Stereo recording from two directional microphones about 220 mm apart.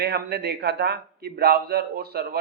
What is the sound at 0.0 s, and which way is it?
A man's voice, 45° right (ahead or behind).